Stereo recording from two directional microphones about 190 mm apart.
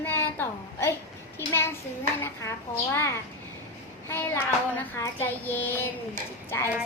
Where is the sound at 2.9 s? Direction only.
15° left (ahead or behind).